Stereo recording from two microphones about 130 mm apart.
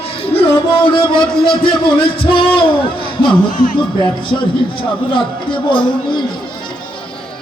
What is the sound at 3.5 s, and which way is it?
Music, 90° left.